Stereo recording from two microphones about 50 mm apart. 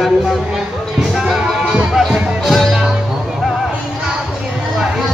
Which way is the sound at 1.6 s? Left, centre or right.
Centre.